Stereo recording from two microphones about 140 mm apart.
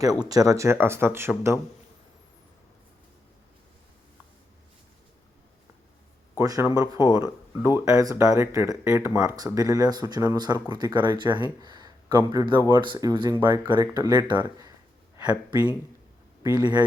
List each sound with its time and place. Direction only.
0.0 s speech: 25° right (ahead or behind)
6.3 s speech: 20° right (ahead or behind)
16.4 s speech: 30° right (ahead or behind)